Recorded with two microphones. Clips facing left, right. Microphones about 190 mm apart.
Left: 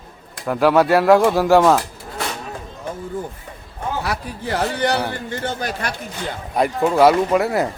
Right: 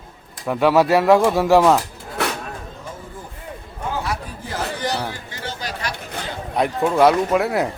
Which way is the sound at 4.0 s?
70° left (ahead or behind).